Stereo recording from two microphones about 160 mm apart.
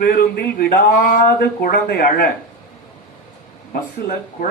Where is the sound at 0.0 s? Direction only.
75° left (ahead or behind).